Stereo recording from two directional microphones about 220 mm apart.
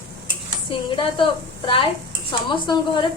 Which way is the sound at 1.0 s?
20° left (ahead or behind).